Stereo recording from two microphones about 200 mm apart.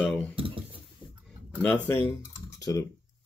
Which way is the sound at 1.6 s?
10° left (ahead or behind).